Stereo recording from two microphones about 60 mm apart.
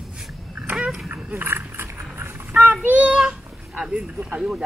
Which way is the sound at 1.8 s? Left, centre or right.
Right.